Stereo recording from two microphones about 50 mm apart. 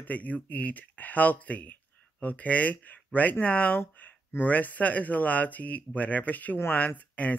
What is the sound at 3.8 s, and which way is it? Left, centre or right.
Speech, left.